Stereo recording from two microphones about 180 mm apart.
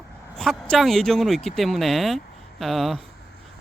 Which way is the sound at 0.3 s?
Centre (ahead or behind).